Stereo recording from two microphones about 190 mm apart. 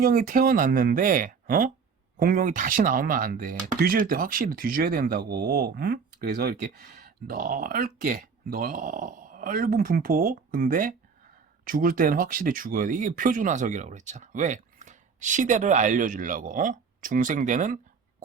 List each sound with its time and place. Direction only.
0.0 s speech: 50° right (ahead or behind)